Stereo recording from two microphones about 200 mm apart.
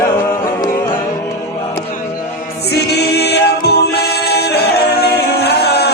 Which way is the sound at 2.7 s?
55° left (ahead or behind).